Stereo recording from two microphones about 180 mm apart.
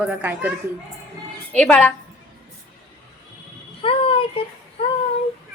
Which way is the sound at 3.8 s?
30° left (ahead or behind).